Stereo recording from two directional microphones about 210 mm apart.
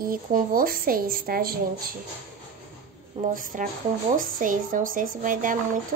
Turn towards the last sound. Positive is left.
turn(degrees=-40)  # may be behind; listen again after turning